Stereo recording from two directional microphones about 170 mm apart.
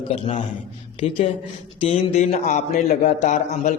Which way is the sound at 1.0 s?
35° left (ahead or behind).